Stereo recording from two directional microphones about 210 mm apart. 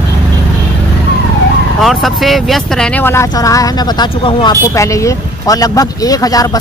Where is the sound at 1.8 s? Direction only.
Centre (ahead or behind).